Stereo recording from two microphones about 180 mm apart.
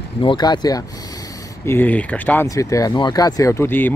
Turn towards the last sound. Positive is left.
turn(degrees=10)  # may be behind; listen again after turning